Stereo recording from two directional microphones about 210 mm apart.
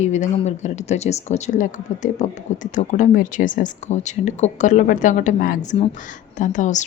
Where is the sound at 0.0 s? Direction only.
30° left (ahead or behind).